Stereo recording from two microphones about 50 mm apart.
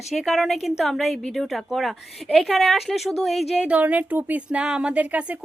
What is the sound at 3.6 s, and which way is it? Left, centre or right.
Speech, right.